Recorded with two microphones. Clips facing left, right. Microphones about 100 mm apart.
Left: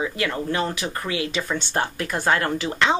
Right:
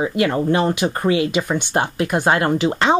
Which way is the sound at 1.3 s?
15° right (ahead or behind).